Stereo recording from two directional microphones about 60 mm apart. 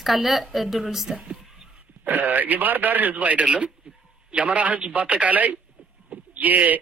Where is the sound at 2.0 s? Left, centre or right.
Right.